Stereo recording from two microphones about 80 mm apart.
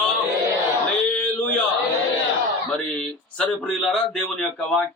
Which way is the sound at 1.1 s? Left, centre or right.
Centre.